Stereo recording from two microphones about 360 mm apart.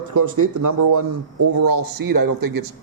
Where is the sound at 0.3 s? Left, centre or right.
Right.